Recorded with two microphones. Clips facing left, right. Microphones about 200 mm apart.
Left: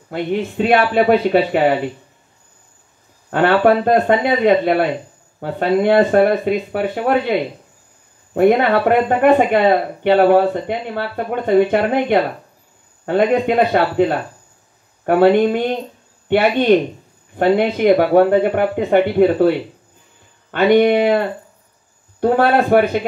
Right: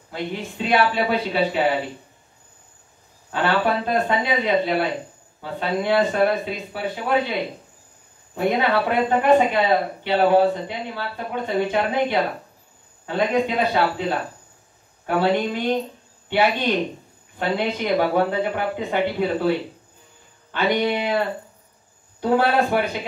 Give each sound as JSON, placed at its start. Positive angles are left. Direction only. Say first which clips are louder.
{"t": 0.1, "sound": "speech", "louder": "left 8 dB", "side_deg": 55}
{"t": 3.3, "sound": "speech", "louder": "left 8 dB", "side_deg": 55}
{"t": 8.4, "sound": "a man's voice", "louder": "left 7 dB", "side_deg": 55}
{"t": 20.5, "sound": "speech", "louder": "left 9 dB", "side_deg": 55}
{"t": 22.2, "sound": "speech", "louder": "left 5 dB", "side_deg": 55}